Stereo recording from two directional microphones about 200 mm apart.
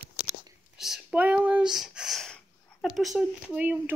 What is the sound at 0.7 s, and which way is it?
Speech, centre (ahead or behind).